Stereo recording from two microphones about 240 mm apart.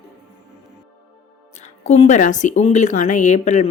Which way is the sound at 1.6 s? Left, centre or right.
Left.